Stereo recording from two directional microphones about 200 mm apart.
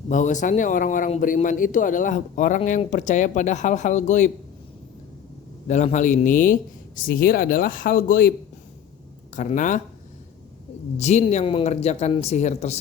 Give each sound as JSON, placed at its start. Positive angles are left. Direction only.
{"t": 0.1, "sound": "speech", "side_deg": 40}
{"t": 5.6, "sound": "speech", "side_deg": 35}
{"t": 9.3, "sound": "speech", "side_deg": 40}
{"t": 10.9, "sound": "speech", "side_deg": 35}